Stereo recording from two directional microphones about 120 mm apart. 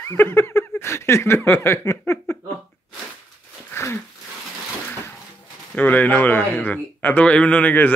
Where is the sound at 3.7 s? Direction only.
20° left (ahead or behind).